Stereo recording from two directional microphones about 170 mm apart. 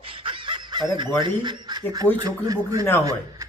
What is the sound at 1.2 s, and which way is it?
Speech, 25° right (ahead or behind).